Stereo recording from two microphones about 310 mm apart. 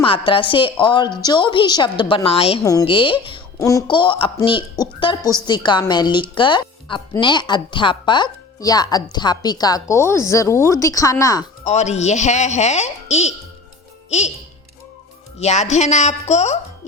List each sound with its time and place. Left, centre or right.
0.0 s a woman's voice: centre
11.6 s speech: left
15.4 s speech: left